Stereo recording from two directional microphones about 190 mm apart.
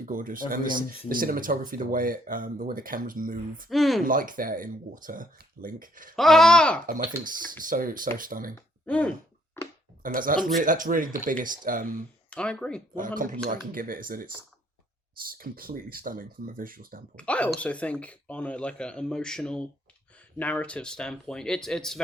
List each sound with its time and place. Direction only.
0.0 s speech: 45° right (ahead or behind)
3.7 s speech: centre (ahead or behind)
4.0 s speech: 45° right (ahead or behind)
6.1 s speech: centre (ahead or behind)
7.3 s speech: 45° right (ahead or behind)
8.5 s speech: 5° left (ahead or behind)
10.0 s speech: 45° right (ahead or behind)
12.3 s speech: 5° left (ahead or behind)
13.5 s speech: 45° right (ahead or behind)
17.2 s speech: 5° left (ahead or behind)